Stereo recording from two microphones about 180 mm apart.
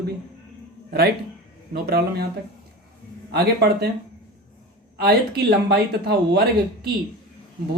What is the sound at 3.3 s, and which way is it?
Speech, 65° right (ahead or behind).